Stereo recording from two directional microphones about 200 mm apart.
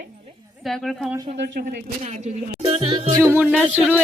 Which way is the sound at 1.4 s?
50° right (ahead or behind).